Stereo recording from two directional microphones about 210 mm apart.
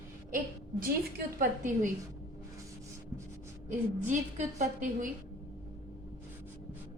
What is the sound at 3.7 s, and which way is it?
A woman's voice, 35° right (ahead or behind).